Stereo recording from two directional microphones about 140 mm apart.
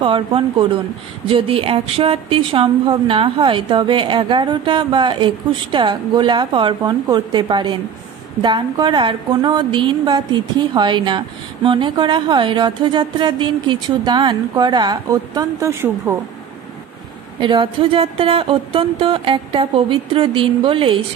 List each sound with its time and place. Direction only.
0.0 s a woman's voice: 40° right (ahead or behind); by 16.2 s 20° right (ahead or behind)
17.4 s a woman's voice: 40° right (ahead or behind)